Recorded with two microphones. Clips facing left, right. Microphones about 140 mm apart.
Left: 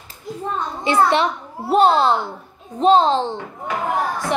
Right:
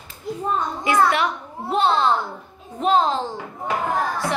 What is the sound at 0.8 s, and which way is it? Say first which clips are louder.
A woman's voice: left 3 dB; 30° left (ahead or behind).